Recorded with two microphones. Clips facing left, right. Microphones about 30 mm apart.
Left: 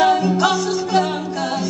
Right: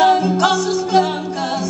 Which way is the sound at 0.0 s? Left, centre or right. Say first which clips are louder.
Right 2 dB; centre.